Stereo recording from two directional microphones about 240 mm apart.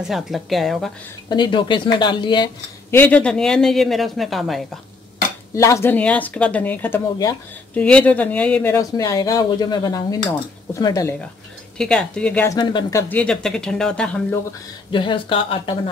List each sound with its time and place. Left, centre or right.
0.0 s speech: centre
1.3 s speech: centre
5.5 s speech: centre
14.9 s speech: left